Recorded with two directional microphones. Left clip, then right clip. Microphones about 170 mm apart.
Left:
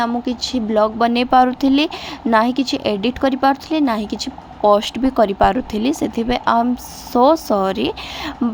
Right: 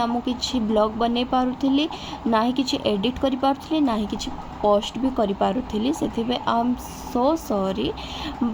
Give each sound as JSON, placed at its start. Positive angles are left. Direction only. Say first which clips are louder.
{"t": 0.0, "sound": "speech", "louder": "left 4 dB", "side_deg": 35}